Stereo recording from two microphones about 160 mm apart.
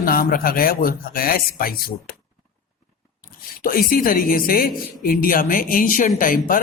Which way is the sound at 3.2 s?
65° left (ahead or behind).